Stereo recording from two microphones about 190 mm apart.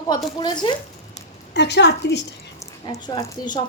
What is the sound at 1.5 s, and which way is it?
Speech, 65° left (ahead or behind).